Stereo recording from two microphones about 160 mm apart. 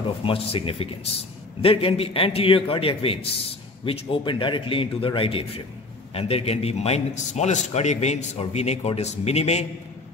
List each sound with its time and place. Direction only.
0.2 s a man's voice: 35° left (ahead or behind)